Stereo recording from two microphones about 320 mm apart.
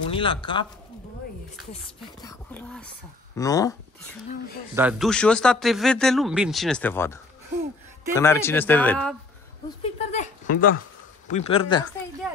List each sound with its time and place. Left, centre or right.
0.1 s speech: centre
2.2 s speech: centre
4.7 s speech: centre
8.2 s speech: centre
9.9 s speech: left